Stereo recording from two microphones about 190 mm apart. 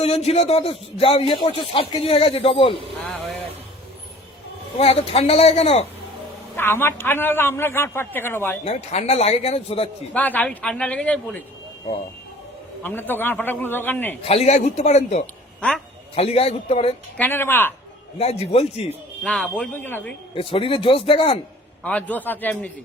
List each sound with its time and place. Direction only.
0.0 s speech: 35° left (ahead or behind)
3.0 s a sound: centre (ahead or behind)
4.8 s speech: 30° left (ahead or behind)
6.6 s a man's voice: 10° left (ahead or behind)
8.6 s speech: 35° left (ahead or behind)
10.2 s a man's voice: 10° left (ahead or behind)
12.8 s a man's voice: 10° left (ahead or behind)
14.3 s speech: 35° left (ahead or behind)
17.2 s a man's voice: 10° left (ahead or behind)
18.2 s speech: 35° left (ahead or behind)
19.2 s a man's voice: 5° left (ahead or behind)
20.3 s speech: 30° left (ahead or behind)
21.8 s a man's voice: 10° left (ahead or behind)